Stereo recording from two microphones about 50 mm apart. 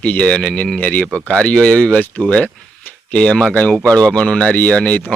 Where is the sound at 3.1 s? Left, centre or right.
Centre.